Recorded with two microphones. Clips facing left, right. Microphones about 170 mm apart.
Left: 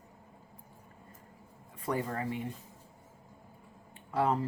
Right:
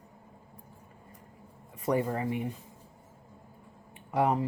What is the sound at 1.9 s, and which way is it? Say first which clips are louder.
Speech: right 5 dB; 25° right (ahead or behind).